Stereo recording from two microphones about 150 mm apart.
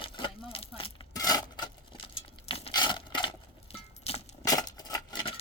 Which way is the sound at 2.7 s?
30° left (ahead or behind).